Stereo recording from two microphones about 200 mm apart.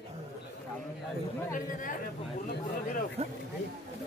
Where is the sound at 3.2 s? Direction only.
30° right (ahead or behind).